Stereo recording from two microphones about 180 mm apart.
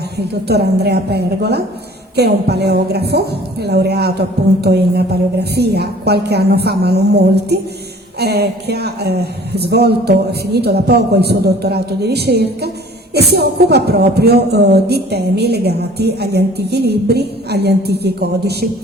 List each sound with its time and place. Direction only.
0.4 s speech: 65° right (ahead or behind)